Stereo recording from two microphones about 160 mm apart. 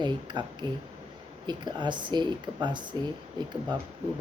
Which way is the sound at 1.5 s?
25° right (ahead or behind).